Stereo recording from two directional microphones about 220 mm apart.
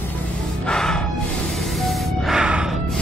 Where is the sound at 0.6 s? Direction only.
5° left (ahead or behind).